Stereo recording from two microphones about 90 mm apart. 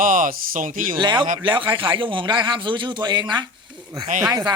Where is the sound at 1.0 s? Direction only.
60° right (ahead or behind).